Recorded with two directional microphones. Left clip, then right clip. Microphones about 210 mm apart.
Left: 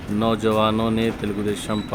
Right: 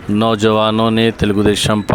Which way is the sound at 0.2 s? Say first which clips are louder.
Right 6 dB; 45° right (ahead or behind).